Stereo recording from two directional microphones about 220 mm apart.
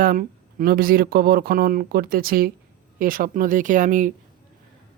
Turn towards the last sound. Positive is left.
turn(degrees=-35)  # may be behind; listen again after turning